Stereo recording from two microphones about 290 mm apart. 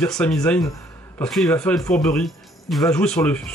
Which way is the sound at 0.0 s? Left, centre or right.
Centre.